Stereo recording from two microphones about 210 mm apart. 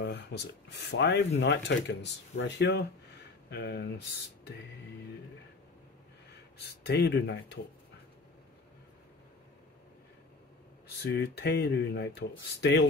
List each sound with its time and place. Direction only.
0.0 s speech: 55° left (ahead or behind)
6.6 s speech: 50° left (ahead or behind)
11.0 s speech: 50° left (ahead or behind)